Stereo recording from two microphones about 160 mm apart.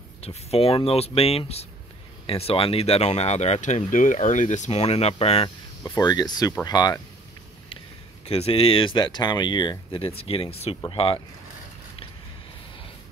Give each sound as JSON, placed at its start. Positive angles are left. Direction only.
{"t": 0.2, "sound": "speech", "side_deg": 40}
{"t": 5.9, "sound": "speech", "side_deg": 25}
{"t": 8.3, "sound": "speech", "side_deg": 40}